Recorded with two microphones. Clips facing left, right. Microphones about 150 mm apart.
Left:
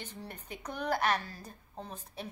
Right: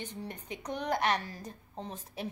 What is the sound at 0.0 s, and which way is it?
A woman's voice, 15° right (ahead or behind).